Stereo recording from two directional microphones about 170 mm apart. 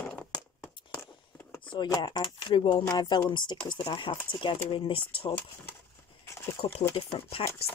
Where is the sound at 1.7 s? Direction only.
25° left (ahead or behind).